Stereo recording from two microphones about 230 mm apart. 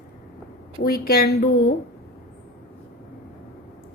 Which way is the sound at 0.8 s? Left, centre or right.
Left.